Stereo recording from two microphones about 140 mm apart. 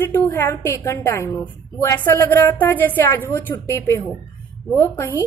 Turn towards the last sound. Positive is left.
turn(degrees=15)  # may be behind; listen again after turning